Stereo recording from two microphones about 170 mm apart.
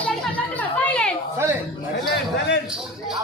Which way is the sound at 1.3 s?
15° right (ahead or behind).